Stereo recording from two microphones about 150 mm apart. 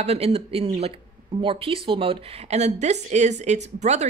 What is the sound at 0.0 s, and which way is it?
Speech, 45° right (ahead or behind).